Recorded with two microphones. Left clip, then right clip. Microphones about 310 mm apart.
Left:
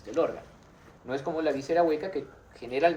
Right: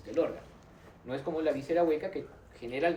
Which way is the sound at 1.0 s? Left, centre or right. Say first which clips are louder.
Left 3 dB; left.